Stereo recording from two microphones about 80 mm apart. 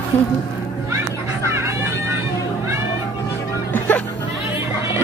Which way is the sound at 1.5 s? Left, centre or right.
Right.